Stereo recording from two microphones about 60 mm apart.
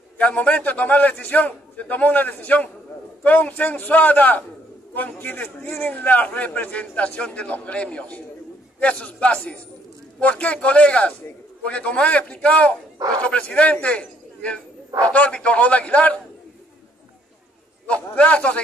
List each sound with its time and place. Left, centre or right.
0.2 s a man's voice: left
17.8 s a man's voice: centre